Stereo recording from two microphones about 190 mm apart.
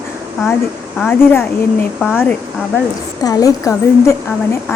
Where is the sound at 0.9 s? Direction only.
5° left (ahead or behind).